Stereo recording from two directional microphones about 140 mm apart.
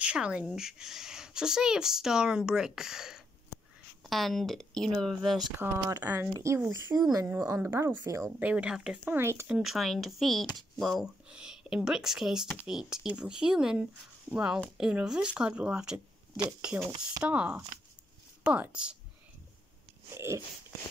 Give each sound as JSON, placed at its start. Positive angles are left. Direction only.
{"t": 0.0, "sound": "speech", "side_deg": -10}
{"t": 5.6, "sound": "speech", "side_deg": -20}
{"t": 8.4, "sound": "speech", "side_deg": -10}
{"t": 9.0, "sound": "speech", "side_deg": -20}
{"t": 9.6, "sound": "speech", "side_deg": 0}
{"t": 20.2, "sound": "speech", "side_deg": -20}